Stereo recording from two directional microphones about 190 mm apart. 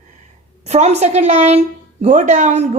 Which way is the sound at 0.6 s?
35° right (ahead or behind).